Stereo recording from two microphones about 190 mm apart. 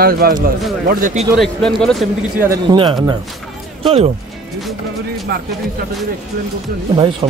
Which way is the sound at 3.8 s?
30° right (ahead or behind).